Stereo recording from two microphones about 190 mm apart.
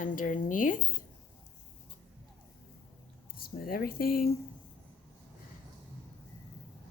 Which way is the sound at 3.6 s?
50° left (ahead or behind).